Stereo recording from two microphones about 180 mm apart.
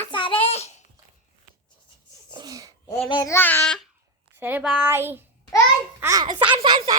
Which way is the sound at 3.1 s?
20° left (ahead or behind).